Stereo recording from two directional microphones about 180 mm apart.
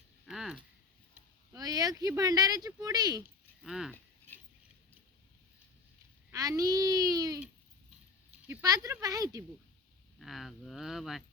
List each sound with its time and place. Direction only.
0.3 s a sound: centre (ahead or behind)
1.5 s speech: 20° right (ahead or behind)
3.6 s speech: 5° right (ahead or behind)
6.3 s speech: 20° right (ahead or behind)
8.4 s speech: 15° right (ahead or behind)
10.2 s speech: centre (ahead or behind)